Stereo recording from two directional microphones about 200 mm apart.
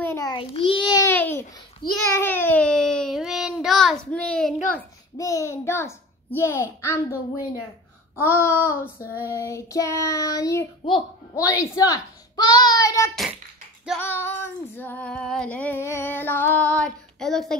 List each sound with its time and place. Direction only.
0.0 s a child's voice: 15° left (ahead or behind)
1.8 s a child's voice: 20° left (ahead or behind)
2.1 s a sound: 10° left (ahead or behind)
5.1 s child singing: 15° left (ahead or behind)
8.2 s child singing: 10° left (ahead or behind)
13.1 s a child's voice: centre (ahead or behind)
13.9 s child singing: 10° left (ahead or behind)